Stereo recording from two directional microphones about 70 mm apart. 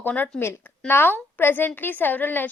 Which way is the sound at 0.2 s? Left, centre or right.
Left.